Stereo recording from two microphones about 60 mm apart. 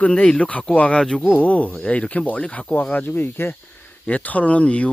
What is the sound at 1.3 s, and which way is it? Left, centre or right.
Speech, left.